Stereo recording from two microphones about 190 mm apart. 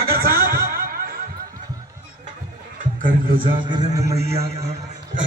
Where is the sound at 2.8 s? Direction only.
45° right (ahead or behind).